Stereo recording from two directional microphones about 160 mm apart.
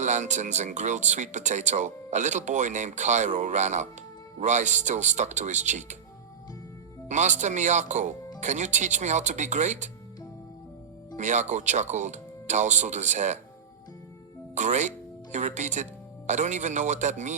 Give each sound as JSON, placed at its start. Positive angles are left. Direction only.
{"t": 0.0, "sound": "speech", "side_deg": -50}
{"t": 7.1, "sound": "speech", "side_deg": -50}
{"t": 11.2, "sound": "speech", "side_deg": -50}
{"t": 14.5, "sound": "speech", "side_deg": -50}